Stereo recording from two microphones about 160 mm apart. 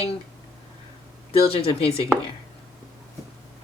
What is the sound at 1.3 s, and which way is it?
Speech, 35° left (ahead or behind).